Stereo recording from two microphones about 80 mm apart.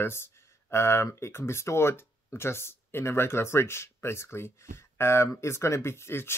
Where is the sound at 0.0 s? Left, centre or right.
Left.